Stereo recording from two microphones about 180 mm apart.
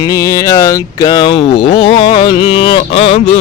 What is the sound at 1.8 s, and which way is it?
Music, 30° left (ahead or behind).